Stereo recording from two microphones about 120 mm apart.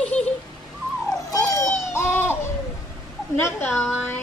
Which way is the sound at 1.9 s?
20° left (ahead or behind).